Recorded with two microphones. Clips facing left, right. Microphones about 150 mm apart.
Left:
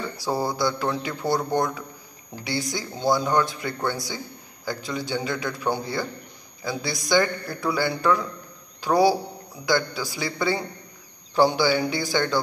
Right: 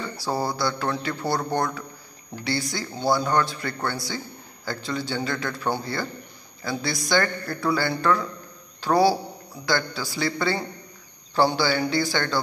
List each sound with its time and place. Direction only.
0.2 s speech: 20° left (ahead or behind)